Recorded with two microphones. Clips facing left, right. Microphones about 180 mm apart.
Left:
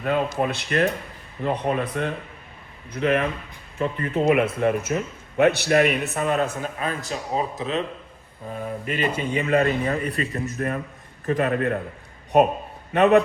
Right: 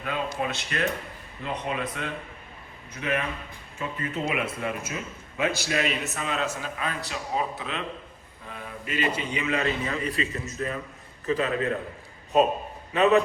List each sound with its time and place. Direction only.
0.0 s a man's voice: 50° left (ahead or behind)
5.4 s a man's voice: 65° left (ahead or behind)
6.7 s a man's voice: 40° left (ahead or behind)
8.9 s a man's voice: 50° left (ahead or behind)